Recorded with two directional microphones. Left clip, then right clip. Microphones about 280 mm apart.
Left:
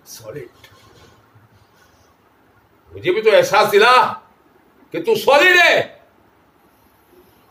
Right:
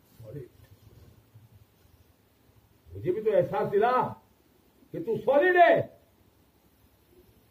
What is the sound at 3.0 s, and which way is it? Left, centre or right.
Speech, centre.